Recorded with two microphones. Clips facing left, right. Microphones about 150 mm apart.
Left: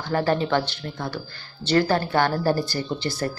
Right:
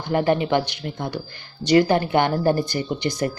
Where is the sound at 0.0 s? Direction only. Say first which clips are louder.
Right 2 dB; 15° right (ahead or behind).